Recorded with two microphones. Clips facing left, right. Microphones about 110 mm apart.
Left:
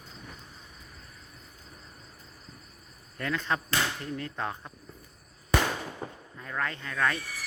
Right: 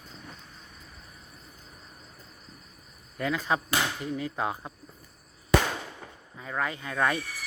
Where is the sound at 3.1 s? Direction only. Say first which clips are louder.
Right 3 dB; 10° right (ahead or behind).